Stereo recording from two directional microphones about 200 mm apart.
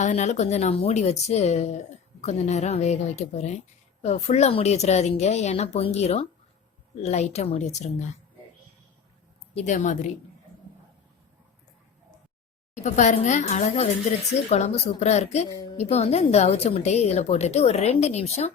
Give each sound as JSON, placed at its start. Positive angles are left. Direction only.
{"t": 0.0, "sound": "speech", "side_deg": 35}
{"t": 9.6, "sound": "speech", "side_deg": 40}
{"t": 12.7, "sound": "speech", "side_deg": 35}